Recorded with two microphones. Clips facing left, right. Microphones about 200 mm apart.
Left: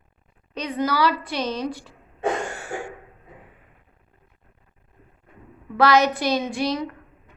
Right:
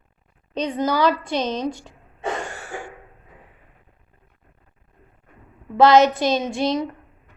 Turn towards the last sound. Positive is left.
turn(degrees=-25)  # may be behind; listen again after turning